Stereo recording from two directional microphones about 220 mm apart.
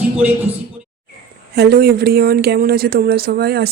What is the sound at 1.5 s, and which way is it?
Speech, 45° right (ahead or behind).